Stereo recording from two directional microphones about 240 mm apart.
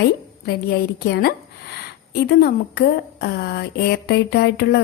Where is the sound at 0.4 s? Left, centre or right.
Left.